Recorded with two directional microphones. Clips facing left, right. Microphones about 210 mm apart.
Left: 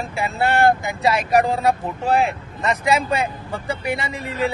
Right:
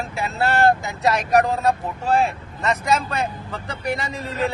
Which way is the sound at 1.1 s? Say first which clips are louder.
Even; 10° left (ahead or behind).